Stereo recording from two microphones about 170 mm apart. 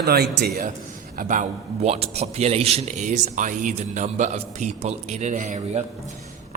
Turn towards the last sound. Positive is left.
turn(degrees=-40)  # may be behind; listen again after turning